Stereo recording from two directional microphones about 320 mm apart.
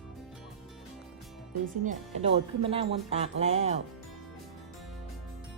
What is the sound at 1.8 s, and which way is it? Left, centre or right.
Speech, centre.